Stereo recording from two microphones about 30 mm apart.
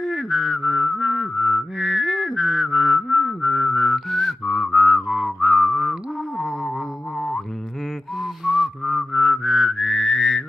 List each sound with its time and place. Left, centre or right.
0.0 s a sound: centre
0.7 s mantra: right
1.0 s music: right
1.4 s mantra: centre
4.1 s whistling: centre
4.5 s whistling: centre; by 5.9 s right
6.3 s music: centre
7.2 s music: centre
8.5 s music: right
8.9 s mantra: centre
9.8 s whistling: centre